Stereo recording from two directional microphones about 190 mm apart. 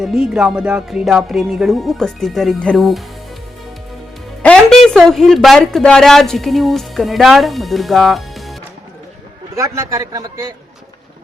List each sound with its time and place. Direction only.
0.0 s music: 5° right (ahead or behind)
4.4 s a woman's voice: centre (ahead or behind)
9.6 s a man's voice: 15° right (ahead or behind)